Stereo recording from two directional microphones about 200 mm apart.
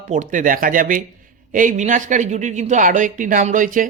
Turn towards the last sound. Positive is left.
turn(degrees=-40)  # may be behind; listen again after turning